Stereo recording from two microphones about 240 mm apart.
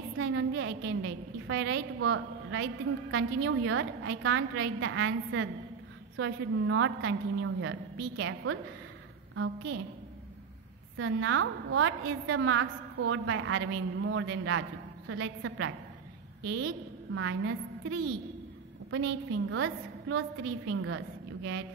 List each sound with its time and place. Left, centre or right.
0.2 s a woman's voice: right
11.0 s a woman's voice: right
16.4 s a woman's voice: right
19.5 s a woman's voice: right